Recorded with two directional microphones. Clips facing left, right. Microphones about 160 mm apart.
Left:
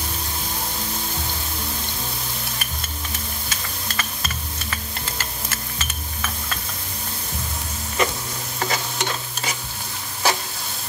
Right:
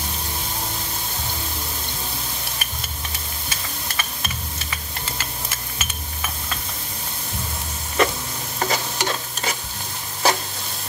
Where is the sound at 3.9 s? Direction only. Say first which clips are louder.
Left 1 dB; 10° right (ahead or behind).